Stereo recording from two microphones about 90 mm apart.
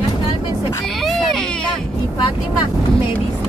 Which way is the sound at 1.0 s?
Centre (ahead or behind).